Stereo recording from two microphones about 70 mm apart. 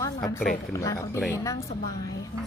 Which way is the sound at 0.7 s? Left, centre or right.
Left.